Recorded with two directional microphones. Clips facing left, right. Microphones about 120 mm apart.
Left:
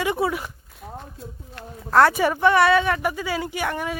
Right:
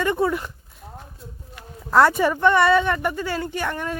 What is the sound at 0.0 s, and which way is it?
Speech, 10° left (ahead or behind).